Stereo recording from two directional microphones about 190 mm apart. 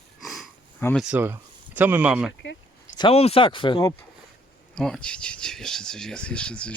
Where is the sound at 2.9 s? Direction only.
25° left (ahead or behind).